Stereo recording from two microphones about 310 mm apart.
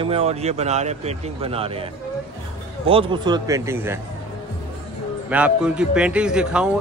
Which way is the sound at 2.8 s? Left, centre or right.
Centre.